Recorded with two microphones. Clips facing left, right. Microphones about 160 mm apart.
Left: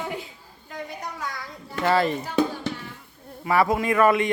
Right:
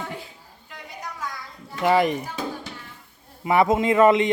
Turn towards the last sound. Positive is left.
turn(degrees=-20)  # may be behind; listen again after turning